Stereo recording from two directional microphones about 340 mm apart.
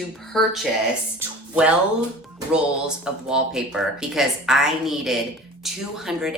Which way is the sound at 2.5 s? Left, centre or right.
Centre.